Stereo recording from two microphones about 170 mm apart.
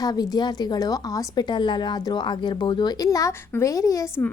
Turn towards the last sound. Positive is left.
turn(degrees=20)  # may be behind; listen again after turning